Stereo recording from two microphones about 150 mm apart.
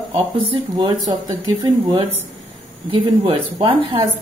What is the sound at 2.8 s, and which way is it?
Speech, 35° right (ahead or behind).